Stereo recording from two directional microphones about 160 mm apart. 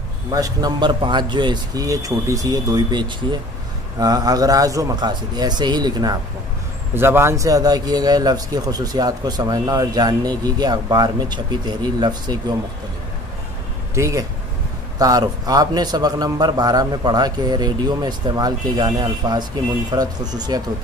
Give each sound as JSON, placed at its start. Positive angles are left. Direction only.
{"t": 0.3, "sound": "a man's voice", "side_deg": -25}
{"t": 7.0, "sound": "a man's voice", "side_deg": -15}
{"t": 13.9, "sound": "a man's voice", "side_deg": -20}